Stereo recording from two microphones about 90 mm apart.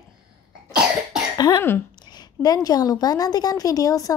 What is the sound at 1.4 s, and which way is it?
Speech, 45° left (ahead or behind).